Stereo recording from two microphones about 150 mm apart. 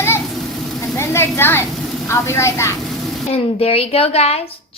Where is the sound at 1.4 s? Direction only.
15° left (ahead or behind).